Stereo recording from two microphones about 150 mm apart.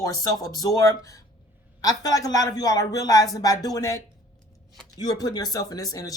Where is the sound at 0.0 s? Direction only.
25° left (ahead or behind).